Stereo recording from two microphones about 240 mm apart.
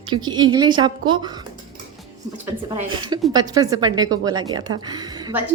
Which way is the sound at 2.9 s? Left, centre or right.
Centre.